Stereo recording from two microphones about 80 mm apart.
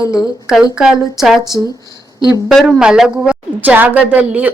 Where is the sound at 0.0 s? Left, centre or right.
Left.